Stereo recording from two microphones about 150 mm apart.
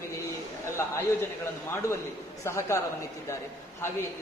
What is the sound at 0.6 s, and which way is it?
Speech, 15° left (ahead or behind).